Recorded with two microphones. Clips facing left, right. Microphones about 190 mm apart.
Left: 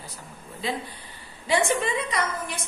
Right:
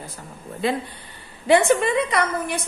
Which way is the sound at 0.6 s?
55° right (ahead or behind).